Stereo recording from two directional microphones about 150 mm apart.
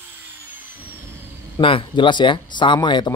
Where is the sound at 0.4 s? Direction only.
10° right (ahead or behind).